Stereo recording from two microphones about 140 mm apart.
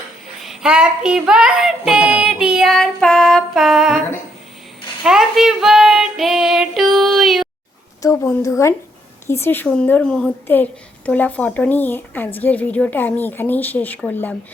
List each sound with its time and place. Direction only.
0.3 s female singing: centre (ahead or behind)
5.0 s female singing: 5° right (ahead or behind)
8.0 s a woman's voice: 20° left (ahead or behind)